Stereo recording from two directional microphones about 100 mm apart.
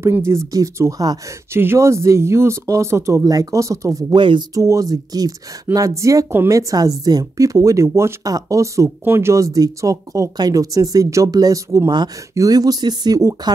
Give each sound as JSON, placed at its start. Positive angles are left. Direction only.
{"t": 0.0, "sound": "speech", "side_deg": -25}
{"t": 1.5, "sound": "speech", "side_deg": -25}
{"t": 4.2, "sound": "speech", "side_deg": -55}
{"t": 4.6, "sound": "speech", "side_deg": -35}
{"t": 6.7, "sound": "speech", "side_deg": -40}